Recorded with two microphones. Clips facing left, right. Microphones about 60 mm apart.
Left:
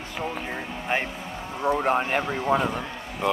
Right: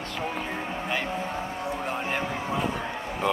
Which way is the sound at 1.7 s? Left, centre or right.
Left.